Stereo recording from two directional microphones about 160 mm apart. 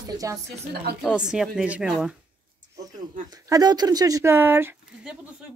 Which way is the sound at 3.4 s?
25° right (ahead or behind).